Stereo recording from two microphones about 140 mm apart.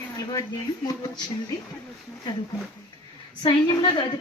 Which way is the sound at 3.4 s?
35° left (ahead or behind).